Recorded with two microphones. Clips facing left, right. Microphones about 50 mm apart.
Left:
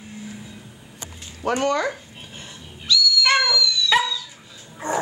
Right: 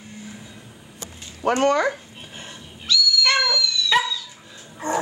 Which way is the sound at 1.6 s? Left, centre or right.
Right.